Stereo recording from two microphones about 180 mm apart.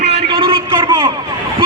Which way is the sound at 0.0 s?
35° right (ahead or behind).